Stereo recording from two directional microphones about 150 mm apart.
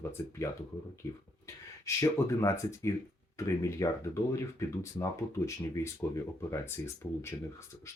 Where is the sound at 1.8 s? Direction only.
20° left (ahead or behind).